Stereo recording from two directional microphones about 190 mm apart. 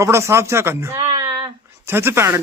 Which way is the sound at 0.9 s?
25° right (ahead or behind).